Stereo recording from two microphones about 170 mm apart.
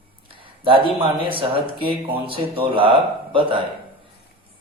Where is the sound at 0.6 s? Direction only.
30° right (ahead or behind).